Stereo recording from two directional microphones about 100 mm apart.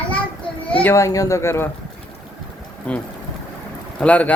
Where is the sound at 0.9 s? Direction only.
30° left (ahead or behind).